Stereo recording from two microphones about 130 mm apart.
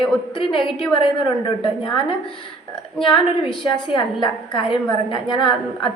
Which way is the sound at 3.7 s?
40° left (ahead or behind).